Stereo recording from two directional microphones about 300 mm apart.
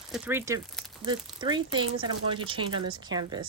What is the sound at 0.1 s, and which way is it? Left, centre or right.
Speech, centre.